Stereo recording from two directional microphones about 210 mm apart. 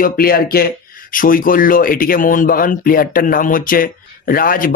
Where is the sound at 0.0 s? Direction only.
45° left (ahead or behind).